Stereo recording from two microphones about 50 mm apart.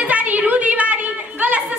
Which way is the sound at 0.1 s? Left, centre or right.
Right.